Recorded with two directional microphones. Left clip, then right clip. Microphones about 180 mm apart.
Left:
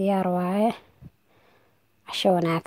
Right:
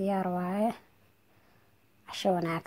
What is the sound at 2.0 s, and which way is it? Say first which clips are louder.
Speech: left 7 dB; 40° left (ahead or behind).